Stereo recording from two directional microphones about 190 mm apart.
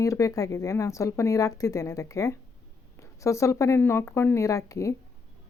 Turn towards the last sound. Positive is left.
turn(degrees=15)  # may be behind; listen again after turning